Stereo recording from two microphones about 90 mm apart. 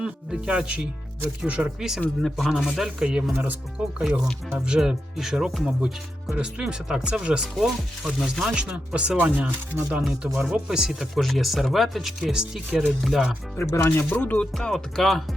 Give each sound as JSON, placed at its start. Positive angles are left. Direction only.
{"t": 0.0, "sound": "speech", "side_deg": -10}
{"t": 2.0, "sound": "speech", "side_deg": 5}
{"t": 13.6, "sound": "speech", "side_deg": 30}
{"t": 14.5, "sound": "speech", "side_deg": 5}